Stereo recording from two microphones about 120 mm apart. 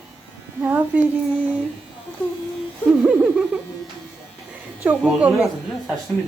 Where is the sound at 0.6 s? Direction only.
15° right (ahead or behind).